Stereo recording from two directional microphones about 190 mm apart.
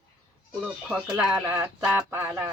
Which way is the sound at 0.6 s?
5° right (ahead or behind).